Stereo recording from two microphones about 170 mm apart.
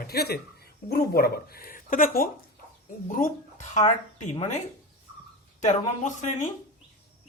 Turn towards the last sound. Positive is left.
turn(degrees=45)  # may be behind; listen again after turning